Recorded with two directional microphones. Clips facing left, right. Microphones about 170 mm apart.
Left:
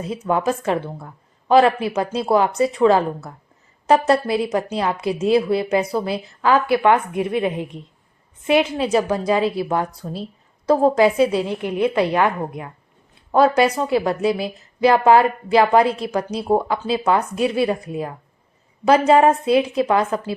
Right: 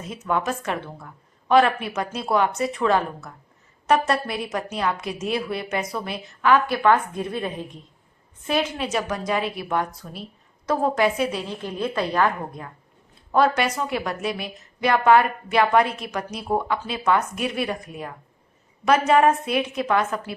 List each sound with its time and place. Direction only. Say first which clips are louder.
0.1 s a woman's voice: left 4 dB; 30° left (ahead or behind)
6.7 s a woman's voice: left 3 dB; 20° left (ahead or behind)
8.8 s a woman's voice: left 7 dB; 30° left (ahead or behind)
11.4 s a woman's voice: left 7 dB; 15° left (ahead or behind)
13.3 s a woman's voice: left 5 dB; 30° left (ahead or behind)